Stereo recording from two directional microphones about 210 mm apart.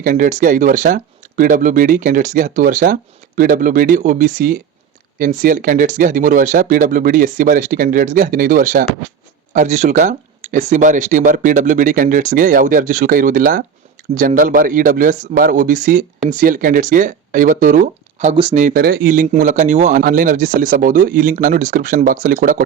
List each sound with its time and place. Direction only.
0.0 s speech: 40° right (ahead or behind)
18.5 s speech: 40° right (ahead or behind)